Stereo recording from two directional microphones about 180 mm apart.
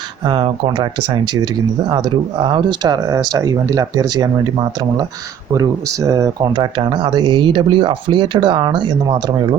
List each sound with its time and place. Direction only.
0.3 s speech: 30° right (ahead or behind)
5.5 s speech: 20° right (ahead or behind)